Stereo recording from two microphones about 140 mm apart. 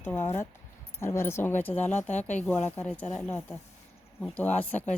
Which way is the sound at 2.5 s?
10° left (ahead or behind).